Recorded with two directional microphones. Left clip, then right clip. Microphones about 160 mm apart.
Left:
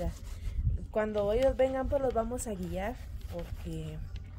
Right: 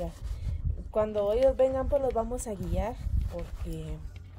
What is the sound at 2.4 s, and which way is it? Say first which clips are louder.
Speech: right 2 dB; centre (ahead or behind).